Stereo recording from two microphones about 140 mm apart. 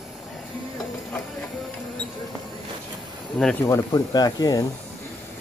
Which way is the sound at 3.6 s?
25° left (ahead or behind).